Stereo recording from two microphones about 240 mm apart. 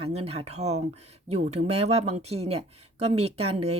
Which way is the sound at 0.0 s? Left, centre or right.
Right.